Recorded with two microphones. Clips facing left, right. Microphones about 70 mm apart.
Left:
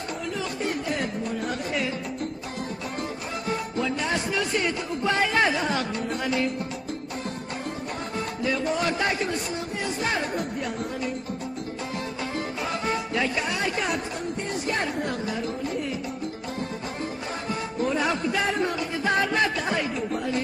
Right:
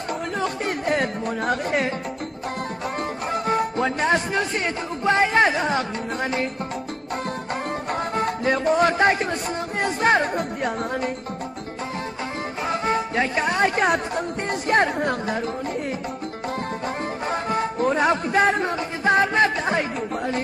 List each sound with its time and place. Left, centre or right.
0.4 s music: right
3.4 s music: right
8.2 s music: right
9.8 s speech: right
12.8 s speech: right
17.3 s speech: right